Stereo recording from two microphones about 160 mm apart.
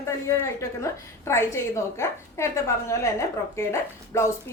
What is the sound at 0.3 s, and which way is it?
A woman's voice, 15° left (ahead or behind).